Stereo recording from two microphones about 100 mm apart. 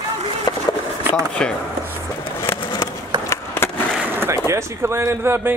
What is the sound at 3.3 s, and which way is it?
Skateboard, 25° left (ahead or behind).